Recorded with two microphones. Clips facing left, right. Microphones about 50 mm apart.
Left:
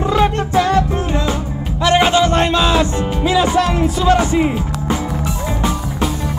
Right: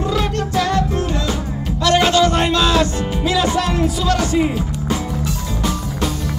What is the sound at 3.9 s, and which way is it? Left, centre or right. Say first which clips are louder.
Speech: left 7 dB; left.